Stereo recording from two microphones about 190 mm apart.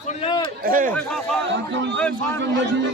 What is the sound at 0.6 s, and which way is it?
Speech, 45° right (ahead or behind).